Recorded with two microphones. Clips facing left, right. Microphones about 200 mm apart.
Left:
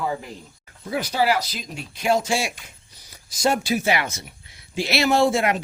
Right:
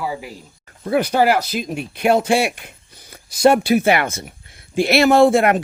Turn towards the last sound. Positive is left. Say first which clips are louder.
# right 6 dB
turn(degrees=-55)  # may be behind; listen again after turning